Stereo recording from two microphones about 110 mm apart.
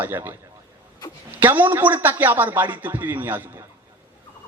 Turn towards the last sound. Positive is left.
turn(degrees=-15)  # may be behind; listen again after turning